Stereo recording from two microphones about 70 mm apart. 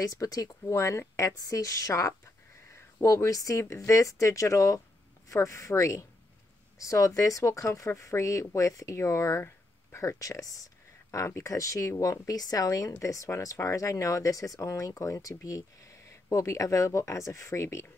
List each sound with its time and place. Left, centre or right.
0.0 s speech: left